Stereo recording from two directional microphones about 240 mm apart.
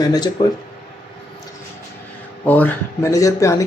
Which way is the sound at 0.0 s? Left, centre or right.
Centre.